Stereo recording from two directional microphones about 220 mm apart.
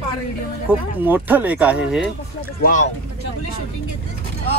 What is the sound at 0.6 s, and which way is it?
Speech, 10° right (ahead or behind).